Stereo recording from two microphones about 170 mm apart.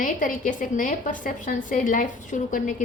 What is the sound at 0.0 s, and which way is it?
A woman's voice, 50° left (ahead or behind).